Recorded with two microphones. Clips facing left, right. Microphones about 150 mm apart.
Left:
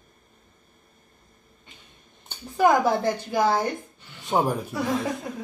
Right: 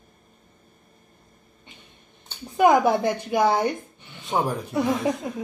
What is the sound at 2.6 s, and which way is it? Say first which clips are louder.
A woman's voice: right 2 dB; 15° right (ahead or behind).